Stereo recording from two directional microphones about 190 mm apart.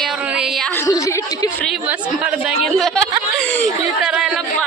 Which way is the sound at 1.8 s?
5° right (ahead or behind).